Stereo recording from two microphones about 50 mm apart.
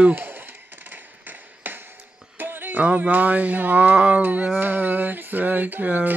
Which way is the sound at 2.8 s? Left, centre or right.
Right.